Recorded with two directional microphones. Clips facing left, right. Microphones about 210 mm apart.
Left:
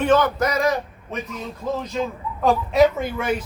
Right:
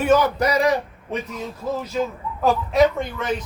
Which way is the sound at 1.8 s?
5° right (ahead or behind).